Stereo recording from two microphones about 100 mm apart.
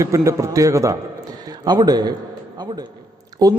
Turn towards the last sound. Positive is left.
turn(degrees=-40)  # may be behind; listen again after turning